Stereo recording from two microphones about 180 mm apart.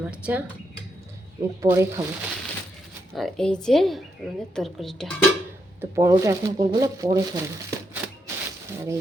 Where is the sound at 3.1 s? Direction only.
Centre (ahead or behind).